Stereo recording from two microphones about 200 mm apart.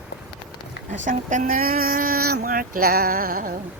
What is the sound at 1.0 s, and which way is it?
Speech, 40° right (ahead or behind).